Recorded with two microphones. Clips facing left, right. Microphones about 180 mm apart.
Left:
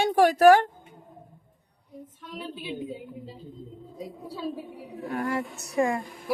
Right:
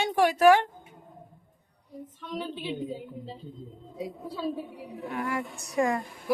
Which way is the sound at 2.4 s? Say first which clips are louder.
Right 1 dB; 10° left (ahead or behind).